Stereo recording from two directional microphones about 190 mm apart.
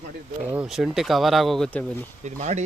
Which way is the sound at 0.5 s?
Centre (ahead or behind).